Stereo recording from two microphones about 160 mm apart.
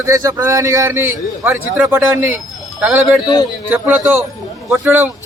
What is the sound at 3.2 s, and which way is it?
Speech, 25° left (ahead or behind).